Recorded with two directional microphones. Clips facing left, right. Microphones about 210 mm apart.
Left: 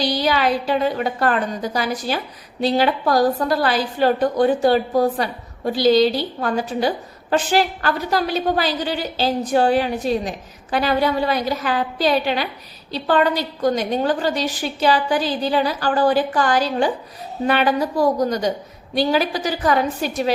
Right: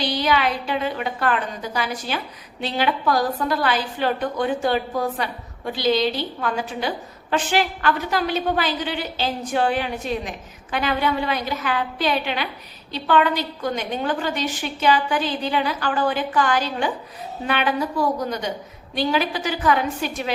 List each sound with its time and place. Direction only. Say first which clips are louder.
0.0 s a woman's voice: left 2 dB; 35° left (ahead or behind)